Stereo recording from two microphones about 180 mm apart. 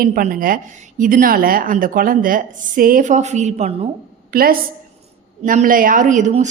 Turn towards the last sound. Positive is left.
turn(degrees=-40)  # may be behind; listen again after turning